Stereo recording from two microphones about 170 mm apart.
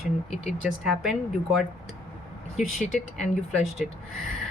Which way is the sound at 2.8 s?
45° left (ahead or behind).